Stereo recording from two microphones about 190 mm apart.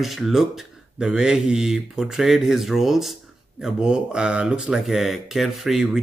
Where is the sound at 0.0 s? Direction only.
Centre (ahead or behind).